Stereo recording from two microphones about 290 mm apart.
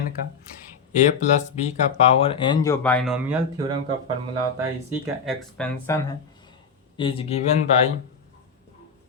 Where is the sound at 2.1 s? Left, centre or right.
Centre.